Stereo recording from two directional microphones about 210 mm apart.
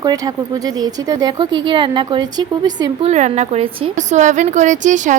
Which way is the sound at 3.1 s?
35° right (ahead or behind).